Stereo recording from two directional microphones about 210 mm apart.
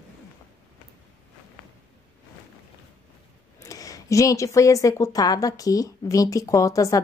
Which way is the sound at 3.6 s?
15° left (ahead or behind).